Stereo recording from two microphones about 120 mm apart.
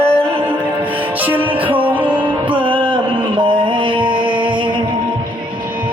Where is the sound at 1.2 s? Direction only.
15° right (ahead or behind).